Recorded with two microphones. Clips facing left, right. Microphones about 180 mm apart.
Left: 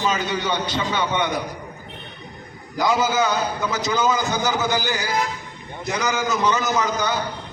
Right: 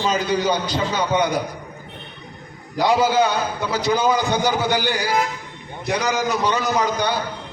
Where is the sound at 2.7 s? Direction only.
35° right (ahead or behind).